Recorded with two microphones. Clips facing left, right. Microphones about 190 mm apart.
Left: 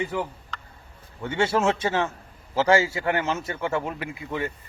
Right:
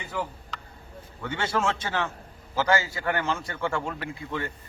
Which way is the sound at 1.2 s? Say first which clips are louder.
Left 5 dB; 25° left (ahead or behind).